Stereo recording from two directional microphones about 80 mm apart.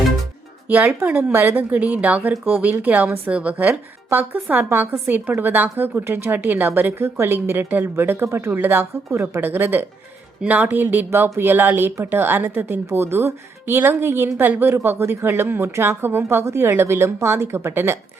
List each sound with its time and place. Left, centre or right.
0.7 s a woman's voice: centre